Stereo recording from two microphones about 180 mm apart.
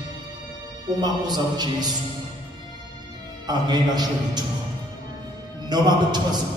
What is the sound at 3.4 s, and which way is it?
A man's voice, 25° right (ahead or behind).